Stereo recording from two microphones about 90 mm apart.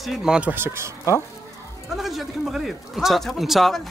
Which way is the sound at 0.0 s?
5° right (ahead or behind).